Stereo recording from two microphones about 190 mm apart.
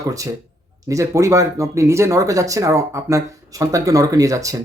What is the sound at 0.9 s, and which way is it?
Speech, 15° right (ahead or behind).